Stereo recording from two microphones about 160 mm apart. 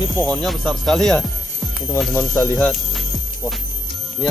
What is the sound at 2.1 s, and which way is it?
Speech, 15° left (ahead or behind).